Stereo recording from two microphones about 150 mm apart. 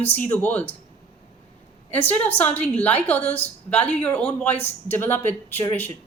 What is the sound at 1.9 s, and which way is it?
A woman's voice, 10° left (ahead or behind).